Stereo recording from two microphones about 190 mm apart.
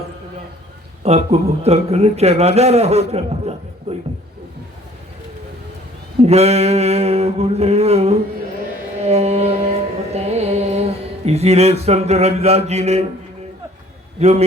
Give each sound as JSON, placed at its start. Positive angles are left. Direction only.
{"t": 1.0, "sound": "a man's voice", "side_deg": -35}
{"t": 6.1, "sound": "a man's voice", "side_deg": -35}
{"t": 9.0, "sound": "music", "side_deg": -35}
{"t": 11.3, "sound": "a man's voice", "side_deg": -35}
{"t": 14.2, "sound": "a man's voice", "side_deg": -35}